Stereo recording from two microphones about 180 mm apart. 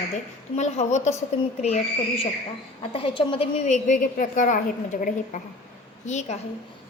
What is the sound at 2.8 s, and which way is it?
A woman's voice, 30° left (ahead or behind).